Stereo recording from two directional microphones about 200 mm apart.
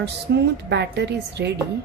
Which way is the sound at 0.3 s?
55° right (ahead or behind).